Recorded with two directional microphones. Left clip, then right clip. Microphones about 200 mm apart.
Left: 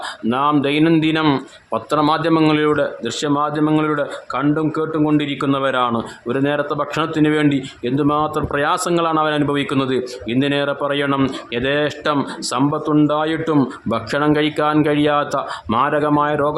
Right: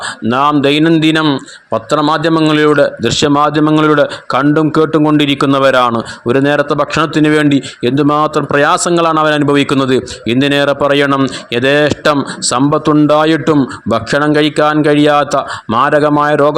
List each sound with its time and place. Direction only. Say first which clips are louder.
0.3 s a man's voice: right 7 dB; 30° right (ahead or behind)